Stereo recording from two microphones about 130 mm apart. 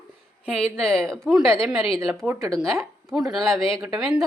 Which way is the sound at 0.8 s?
5° left (ahead or behind).